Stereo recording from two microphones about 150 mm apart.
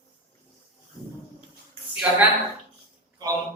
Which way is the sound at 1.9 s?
10° right (ahead or behind).